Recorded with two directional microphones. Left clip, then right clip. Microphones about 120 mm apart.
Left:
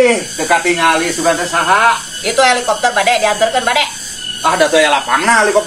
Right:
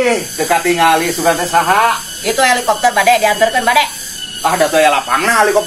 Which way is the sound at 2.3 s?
Centre (ahead or behind).